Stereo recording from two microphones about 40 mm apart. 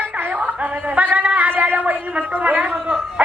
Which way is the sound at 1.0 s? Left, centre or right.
Right.